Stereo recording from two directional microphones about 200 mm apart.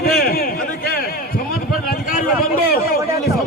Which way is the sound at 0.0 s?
50° left (ahead or behind).